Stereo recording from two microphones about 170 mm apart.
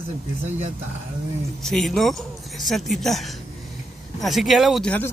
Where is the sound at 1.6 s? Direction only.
5° left (ahead or behind).